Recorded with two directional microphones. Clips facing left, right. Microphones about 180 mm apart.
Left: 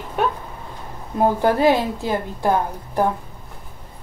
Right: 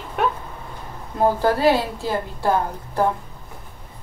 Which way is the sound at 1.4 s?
20° left (ahead or behind).